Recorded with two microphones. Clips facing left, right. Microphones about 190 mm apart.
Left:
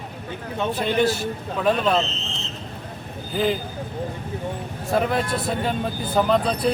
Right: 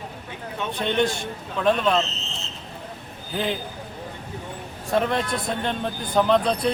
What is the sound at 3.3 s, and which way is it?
Speech, centre (ahead or behind).